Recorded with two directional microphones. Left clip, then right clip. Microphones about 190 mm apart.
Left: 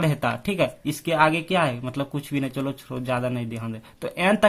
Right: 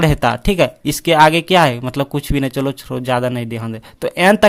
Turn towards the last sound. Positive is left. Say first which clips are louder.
# right 9 dB
turn(degrees=-35)  # may be behind; listen again after turning